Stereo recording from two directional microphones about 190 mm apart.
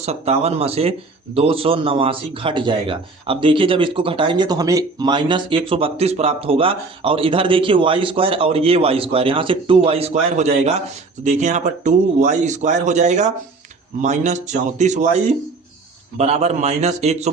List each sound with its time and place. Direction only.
0.0 s speech: 35° right (ahead or behind)